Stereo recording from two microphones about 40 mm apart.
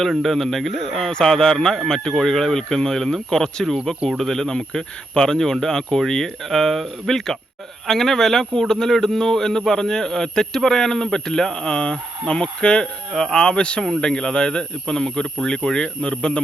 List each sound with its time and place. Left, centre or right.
0.0 s speech: centre; by 16.4 s left